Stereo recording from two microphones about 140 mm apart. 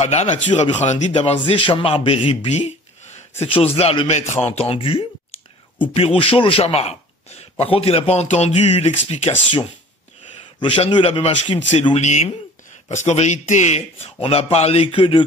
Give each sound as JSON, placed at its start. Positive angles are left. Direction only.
{"t": 0.0, "sound": "a man's voice", "side_deg": 50}
{"t": 4.1, "sound": "a man's voice", "side_deg": 50}
{"t": 10.6, "sound": "a man's voice", "side_deg": 35}
{"t": 11.0, "sound": "a man's voice", "side_deg": 45}